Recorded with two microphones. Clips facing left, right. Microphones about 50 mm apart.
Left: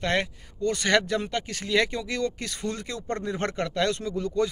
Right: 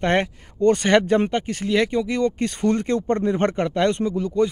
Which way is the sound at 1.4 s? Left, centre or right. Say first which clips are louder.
Right 4 dB; centre.